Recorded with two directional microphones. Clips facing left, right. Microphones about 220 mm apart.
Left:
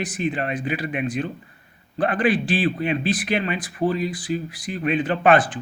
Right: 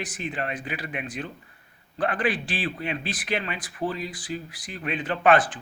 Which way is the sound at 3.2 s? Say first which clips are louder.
Left 6 dB; 15° left (ahead or behind).